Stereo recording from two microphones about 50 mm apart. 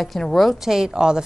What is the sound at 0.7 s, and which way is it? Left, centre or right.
Speech, centre.